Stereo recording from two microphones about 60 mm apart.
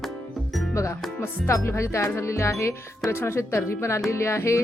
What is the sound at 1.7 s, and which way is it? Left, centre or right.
Speech, left.